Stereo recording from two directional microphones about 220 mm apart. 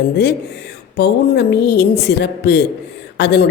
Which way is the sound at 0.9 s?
50° left (ahead or behind).